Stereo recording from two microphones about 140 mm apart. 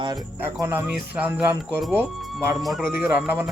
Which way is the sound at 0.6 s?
15° right (ahead or behind).